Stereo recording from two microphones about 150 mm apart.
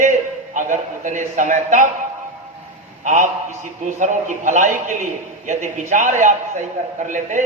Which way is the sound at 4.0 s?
55° right (ahead or behind).